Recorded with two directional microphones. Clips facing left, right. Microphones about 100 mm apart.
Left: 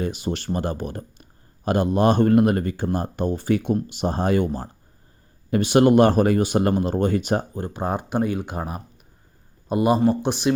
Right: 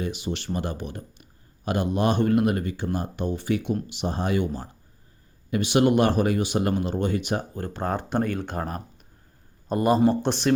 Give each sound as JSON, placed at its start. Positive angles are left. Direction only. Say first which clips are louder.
{"t": 0.0, "sound": "speech", "louder": "left 3 dB", "side_deg": 40}
{"t": 7.5, "sound": "speech", "louder": "left 2 dB", "side_deg": 15}